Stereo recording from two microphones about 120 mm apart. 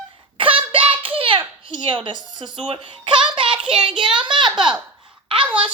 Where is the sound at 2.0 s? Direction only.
40° right (ahead or behind).